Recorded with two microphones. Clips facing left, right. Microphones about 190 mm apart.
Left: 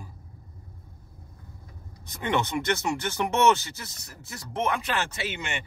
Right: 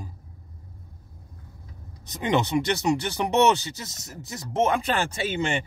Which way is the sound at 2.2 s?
20° right (ahead or behind).